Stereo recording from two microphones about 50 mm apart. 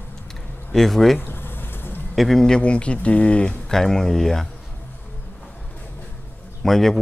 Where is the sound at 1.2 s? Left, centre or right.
Left.